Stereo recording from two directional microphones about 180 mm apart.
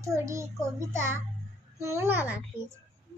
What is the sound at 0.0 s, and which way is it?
A child's voice, 15° right (ahead or behind).